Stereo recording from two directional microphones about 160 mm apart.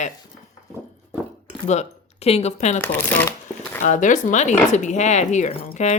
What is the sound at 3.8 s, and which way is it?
Speech, 50° left (ahead or behind).